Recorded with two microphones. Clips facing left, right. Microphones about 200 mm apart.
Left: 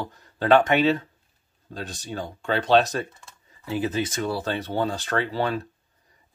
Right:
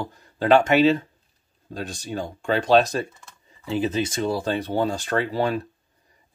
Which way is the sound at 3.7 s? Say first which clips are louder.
Right 2 dB; 20° right (ahead or behind).